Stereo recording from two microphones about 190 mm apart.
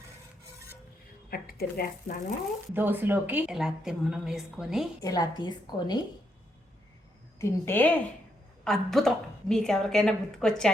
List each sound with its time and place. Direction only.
1.3 s speech: 50° left (ahead or behind)
2.7 s a woman's voice: 10° right (ahead or behind)
5.0 s a woman's voice: 20° left (ahead or behind)
7.3 s a woman's voice: 15° left (ahead or behind)